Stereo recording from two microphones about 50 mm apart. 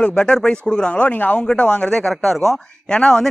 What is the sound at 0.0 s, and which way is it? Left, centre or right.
Speech, centre.